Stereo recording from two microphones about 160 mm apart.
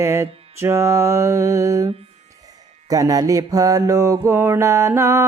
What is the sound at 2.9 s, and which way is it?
Music, 20° right (ahead or behind).